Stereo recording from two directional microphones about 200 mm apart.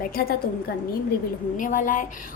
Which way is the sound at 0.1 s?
50° left (ahead or behind).